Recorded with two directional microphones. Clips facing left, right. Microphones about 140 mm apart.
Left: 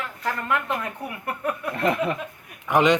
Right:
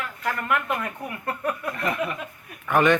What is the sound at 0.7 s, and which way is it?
Speech, 15° left (ahead or behind).